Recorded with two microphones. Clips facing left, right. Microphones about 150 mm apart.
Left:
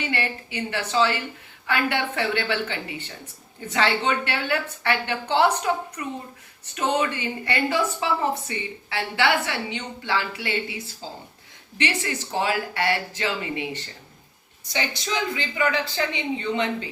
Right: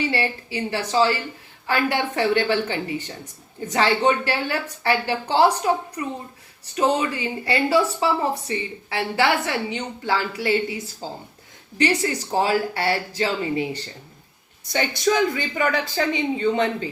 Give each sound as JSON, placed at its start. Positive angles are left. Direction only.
{"t": 0.0, "sound": "speech", "side_deg": -30}
{"t": 11.8, "sound": "speech", "side_deg": -40}
{"t": 14.7, "sound": "speech", "side_deg": -50}